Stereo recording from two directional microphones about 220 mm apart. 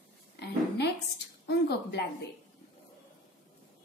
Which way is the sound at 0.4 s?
50° left (ahead or behind).